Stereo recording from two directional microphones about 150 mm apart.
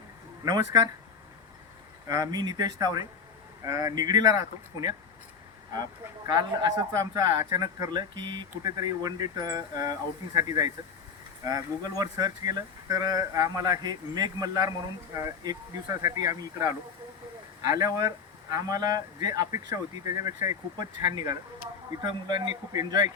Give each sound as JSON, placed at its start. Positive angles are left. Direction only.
{"t": 0.4, "sound": "speech", "side_deg": -25}
{"t": 2.0, "sound": "speech", "side_deg": -25}